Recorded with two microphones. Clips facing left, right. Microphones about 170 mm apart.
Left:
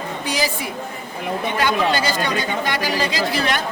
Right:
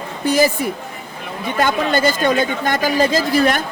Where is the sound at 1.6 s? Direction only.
50° right (ahead or behind).